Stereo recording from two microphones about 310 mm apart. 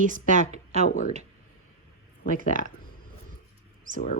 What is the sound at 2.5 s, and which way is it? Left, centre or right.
Speech, right.